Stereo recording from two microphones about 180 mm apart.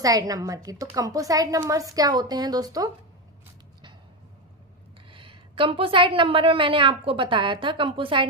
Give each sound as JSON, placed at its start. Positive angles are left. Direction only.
{"t": 0.0, "sound": "a woman's voice", "side_deg": -20}
{"t": 5.1, "sound": "a woman's voice", "side_deg": -30}